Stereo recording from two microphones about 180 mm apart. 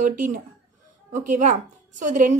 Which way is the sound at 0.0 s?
45° right (ahead or behind).